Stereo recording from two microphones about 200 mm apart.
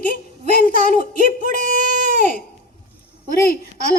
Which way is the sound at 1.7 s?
40° right (ahead or behind).